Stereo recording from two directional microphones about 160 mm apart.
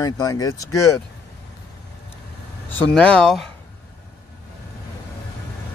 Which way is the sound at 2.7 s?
10° left (ahead or behind).